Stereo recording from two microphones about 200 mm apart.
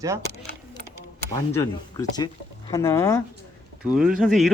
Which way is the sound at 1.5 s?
15° left (ahead or behind).